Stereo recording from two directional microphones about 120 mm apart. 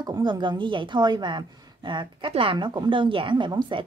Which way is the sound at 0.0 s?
35° right (ahead or behind).